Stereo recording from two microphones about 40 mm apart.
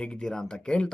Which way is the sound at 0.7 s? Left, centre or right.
Left.